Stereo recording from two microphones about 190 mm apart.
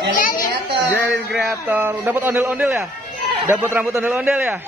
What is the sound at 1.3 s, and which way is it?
Speech, 5° right (ahead or behind).